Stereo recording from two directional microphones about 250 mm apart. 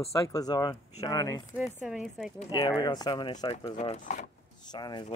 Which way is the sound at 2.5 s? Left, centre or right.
Centre.